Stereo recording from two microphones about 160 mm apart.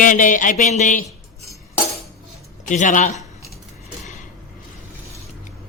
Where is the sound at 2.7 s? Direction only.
50° left (ahead or behind).